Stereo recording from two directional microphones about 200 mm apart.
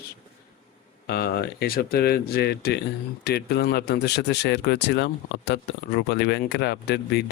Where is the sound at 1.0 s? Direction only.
50° left (ahead or behind).